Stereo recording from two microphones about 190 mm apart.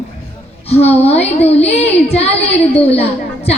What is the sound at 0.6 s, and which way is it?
A woman's voice, 35° left (ahead or behind).